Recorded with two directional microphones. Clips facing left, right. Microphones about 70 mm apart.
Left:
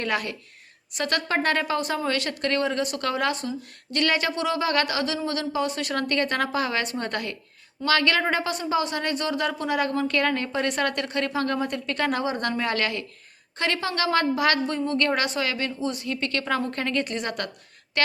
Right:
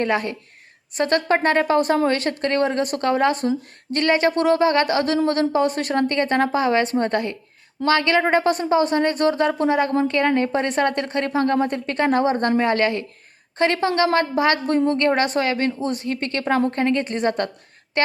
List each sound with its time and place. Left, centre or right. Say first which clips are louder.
0.0 s a woman's voice: right 6 dB; right
4.7 s a woman's voice: right 6 dB; right
5.9 s a woman's voice: right 5 dB; right